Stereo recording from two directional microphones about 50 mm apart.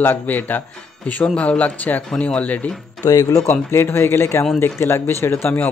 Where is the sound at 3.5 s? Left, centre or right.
Left.